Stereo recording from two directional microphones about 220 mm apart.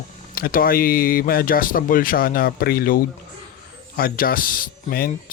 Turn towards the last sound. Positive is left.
turn(degrees=40)  # may be behind; listen again after turning